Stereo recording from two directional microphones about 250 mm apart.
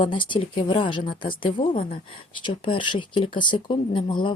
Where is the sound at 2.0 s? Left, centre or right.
Left.